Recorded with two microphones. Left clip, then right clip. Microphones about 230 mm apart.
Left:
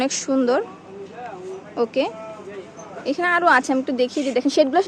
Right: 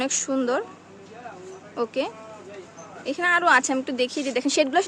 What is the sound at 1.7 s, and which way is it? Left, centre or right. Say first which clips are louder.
Speech: left 5 dB; centre.